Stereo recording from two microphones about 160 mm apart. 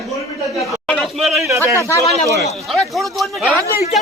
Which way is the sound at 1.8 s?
20° left (ahead or behind).